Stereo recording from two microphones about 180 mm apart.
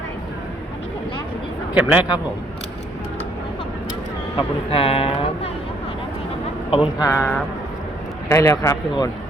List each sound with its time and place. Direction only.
1.7 s a man's voice: 5° right (ahead or behind)
4.4 s speech: 30° left (ahead or behind)
6.7 s a man's voice: 30° left (ahead or behind)
7.1 s speech: 15° left (ahead or behind)